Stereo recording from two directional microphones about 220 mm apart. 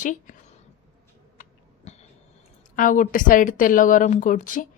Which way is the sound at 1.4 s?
30° left (ahead or behind).